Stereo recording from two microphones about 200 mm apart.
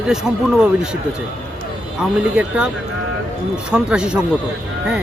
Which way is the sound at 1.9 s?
5° right (ahead or behind).